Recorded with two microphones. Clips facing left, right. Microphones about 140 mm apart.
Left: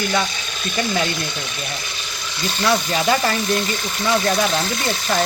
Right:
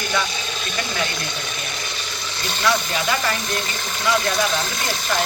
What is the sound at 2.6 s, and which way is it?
Speech, 30° left (ahead or behind).